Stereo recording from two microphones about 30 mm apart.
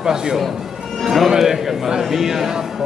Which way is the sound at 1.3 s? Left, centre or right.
Centre.